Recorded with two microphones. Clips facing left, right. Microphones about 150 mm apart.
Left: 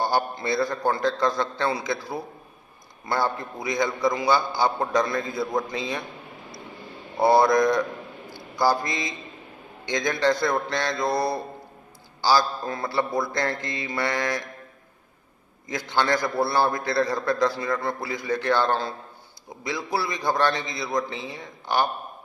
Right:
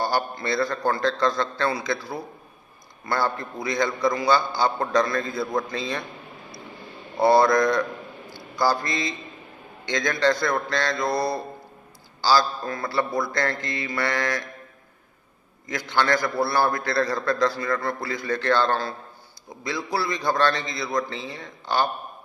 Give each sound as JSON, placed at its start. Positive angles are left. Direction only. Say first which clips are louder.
{"t": 0.0, "sound": "a man's voice", "louder": "left 1 dB", "side_deg": 20}
{"t": 7.2, "sound": "a man's voice", "louder": "even", "side_deg": 15}
{"t": 15.7, "sound": "a man's voice", "louder": "right 1 dB", "side_deg": 20}